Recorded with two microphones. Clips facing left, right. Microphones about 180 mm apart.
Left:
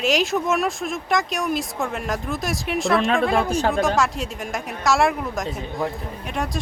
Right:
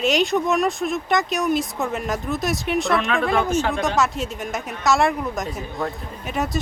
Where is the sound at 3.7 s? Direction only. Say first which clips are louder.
Left 1 dB; centre (ahead or behind).